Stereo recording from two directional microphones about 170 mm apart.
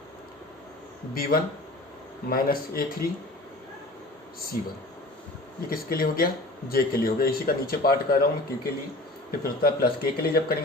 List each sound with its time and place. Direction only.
1.1 s speech: 60° left (ahead or behind)
5.6 s speech: 60° left (ahead or behind)